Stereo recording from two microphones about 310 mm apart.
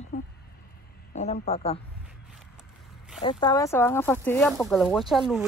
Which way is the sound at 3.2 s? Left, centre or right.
Centre.